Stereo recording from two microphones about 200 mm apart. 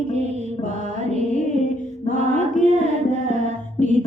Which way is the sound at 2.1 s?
35° right (ahead or behind).